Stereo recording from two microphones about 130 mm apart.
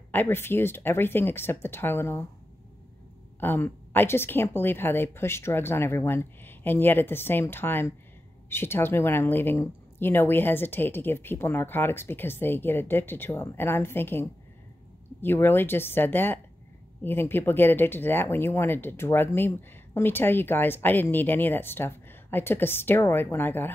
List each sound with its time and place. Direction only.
0.1 s speech: 15° left (ahead or behind)
3.3 s speech: 15° left (ahead or behind)
15.2 s speech: 15° left (ahead or behind)